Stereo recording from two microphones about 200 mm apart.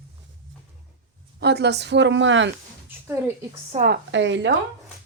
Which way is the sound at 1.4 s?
55° right (ahead or behind).